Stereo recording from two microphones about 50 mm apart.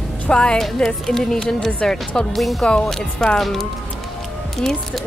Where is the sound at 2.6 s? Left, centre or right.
Centre.